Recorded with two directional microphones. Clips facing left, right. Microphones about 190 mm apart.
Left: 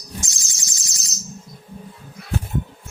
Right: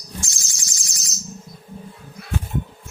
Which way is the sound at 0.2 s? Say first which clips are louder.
Even; 20° left (ahead or behind).